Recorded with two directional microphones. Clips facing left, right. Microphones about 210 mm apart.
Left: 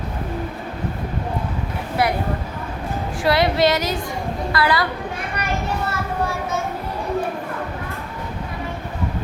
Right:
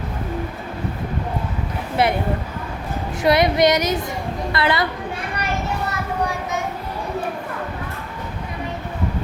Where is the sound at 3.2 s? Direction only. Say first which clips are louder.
Right 2 dB; 20° right (ahead or behind).